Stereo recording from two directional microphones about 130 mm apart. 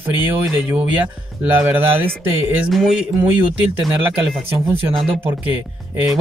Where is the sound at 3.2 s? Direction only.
15° right (ahead or behind).